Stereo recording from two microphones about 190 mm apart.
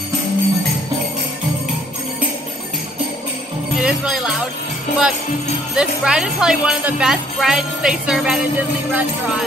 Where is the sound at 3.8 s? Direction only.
5° right (ahead or behind).